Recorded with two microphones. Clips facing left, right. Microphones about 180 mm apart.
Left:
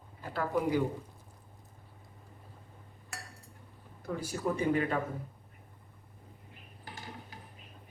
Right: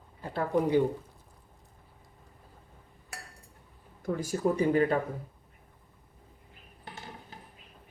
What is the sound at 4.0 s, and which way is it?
Speech, 45° right (ahead or behind).